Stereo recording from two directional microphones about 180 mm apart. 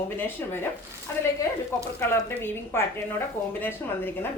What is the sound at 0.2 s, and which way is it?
A woman's voice, 15° left (ahead or behind).